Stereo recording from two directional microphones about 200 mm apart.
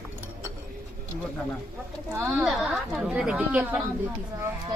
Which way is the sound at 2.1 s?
10° right (ahead or behind).